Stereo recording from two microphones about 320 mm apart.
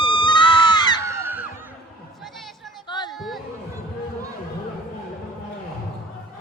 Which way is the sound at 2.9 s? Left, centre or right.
Centre.